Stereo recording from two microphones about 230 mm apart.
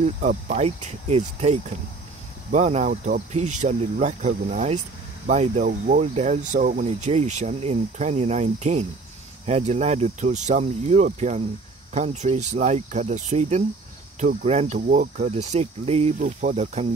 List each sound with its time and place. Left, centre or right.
0.0 s speech: right